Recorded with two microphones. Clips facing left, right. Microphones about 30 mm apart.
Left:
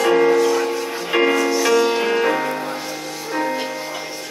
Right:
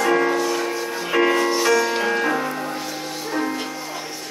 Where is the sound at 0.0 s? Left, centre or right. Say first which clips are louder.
Left 4 dB; centre.